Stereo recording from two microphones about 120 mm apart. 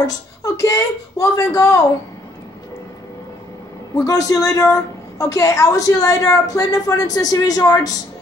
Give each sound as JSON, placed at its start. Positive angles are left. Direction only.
{"t": 0.0, "sound": "a woman's voice", "side_deg": 30}
{"t": 3.9, "sound": "a woman's voice", "side_deg": 30}